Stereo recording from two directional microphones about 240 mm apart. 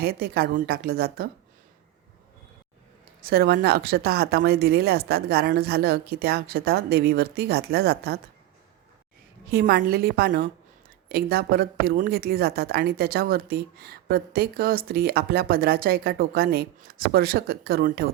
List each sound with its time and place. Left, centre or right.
0.0 s a woman's voice: right
3.2 s a woman's voice: right
9.5 s a woman's voice: right